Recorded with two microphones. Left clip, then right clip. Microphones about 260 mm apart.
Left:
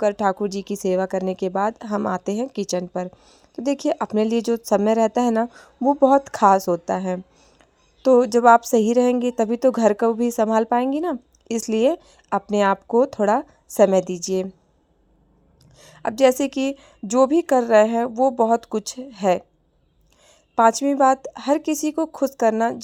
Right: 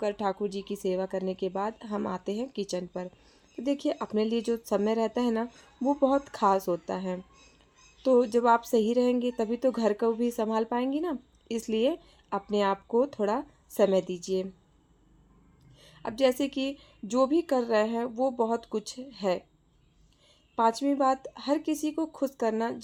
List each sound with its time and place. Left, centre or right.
0.0 s speech: left
15.8 s speech: left